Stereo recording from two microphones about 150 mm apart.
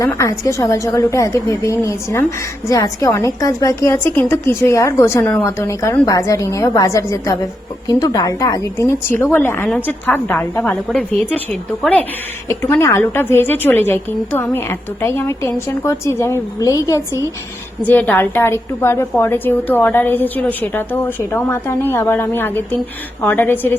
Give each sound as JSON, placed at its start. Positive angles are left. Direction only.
{"t": 0.0, "sound": "a woman's voice", "side_deg": 20}
{"t": 17.8, "sound": "a woman's voice", "side_deg": 10}